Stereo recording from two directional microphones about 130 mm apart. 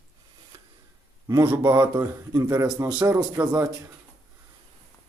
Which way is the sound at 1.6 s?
35° right (ahead or behind).